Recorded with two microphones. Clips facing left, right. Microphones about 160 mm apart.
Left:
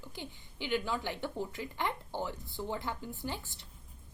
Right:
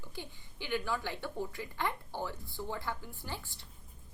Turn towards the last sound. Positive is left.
turn(degrees=20)  # may be behind; listen again after turning